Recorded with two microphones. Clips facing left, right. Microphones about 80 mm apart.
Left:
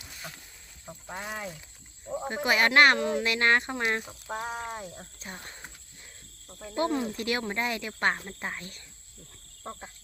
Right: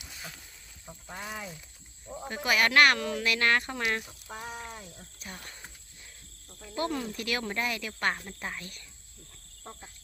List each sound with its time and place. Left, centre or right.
0.0 s a sound: centre
0.9 s a sound: centre
2.0 s speech: centre
4.0 s speech: left
4.7 s speech: left
5.2 s speech: left
6.7 s speech: left